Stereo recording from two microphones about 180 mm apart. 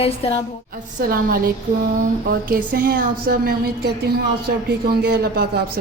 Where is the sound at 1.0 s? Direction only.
55° right (ahead or behind).